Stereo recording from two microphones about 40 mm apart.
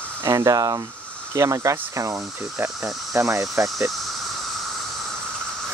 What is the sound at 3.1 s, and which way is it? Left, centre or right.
Speech, right.